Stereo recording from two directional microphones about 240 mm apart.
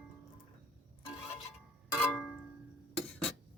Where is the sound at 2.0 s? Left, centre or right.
Centre.